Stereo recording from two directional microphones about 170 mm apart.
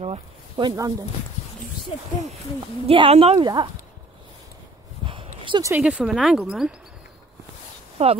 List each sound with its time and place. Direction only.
0.0 s speech: 30° right (ahead or behind)
2.9 s speech: 35° right (ahead or behind)
5.0 s a sound: 30° right (ahead or behind)
5.7 s speech: 5° right (ahead or behind)
8.0 s speech: 35° right (ahead or behind)